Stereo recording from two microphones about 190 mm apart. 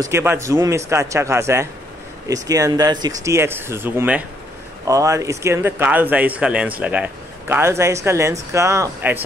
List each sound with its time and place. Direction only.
0.0 s speech: 10° right (ahead or behind)